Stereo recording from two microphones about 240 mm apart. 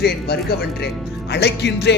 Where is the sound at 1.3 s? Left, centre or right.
Left.